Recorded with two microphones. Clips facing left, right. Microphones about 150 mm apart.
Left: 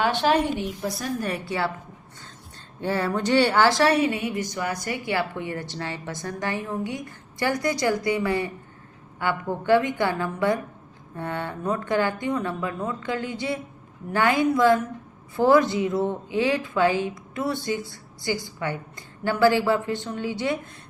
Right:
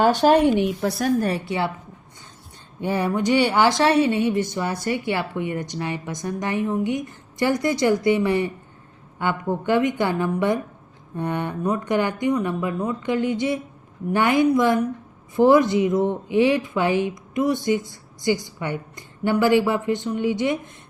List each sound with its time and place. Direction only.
0.0 s a woman's voice: 40° right (ahead or behind)
0.6 s a woman's voice: 70° right (ahead or behind)
1.5 s a woman's voice: 20° right (ahead or behind)
2.8 s a woman's voice: 15° right (ahead or behind)